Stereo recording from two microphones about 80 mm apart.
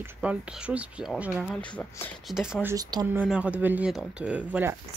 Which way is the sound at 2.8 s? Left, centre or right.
Right.